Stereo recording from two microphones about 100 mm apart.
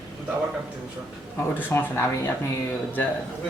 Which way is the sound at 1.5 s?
20° left (ahead or behind).